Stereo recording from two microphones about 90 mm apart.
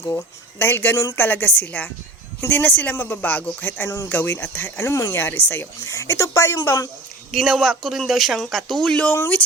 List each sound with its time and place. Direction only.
0.6 s speech: 25° left (ahead or behind)
3.8 s speech: 35° left (ahead or behind)
4.1 s speech: 20° left (ahead or behind)
5.1 s speech: 25° left (ahead or behind); by 6.9 s 40° left (ahead or behind)
7.3 s speech: centre (ahead or behind)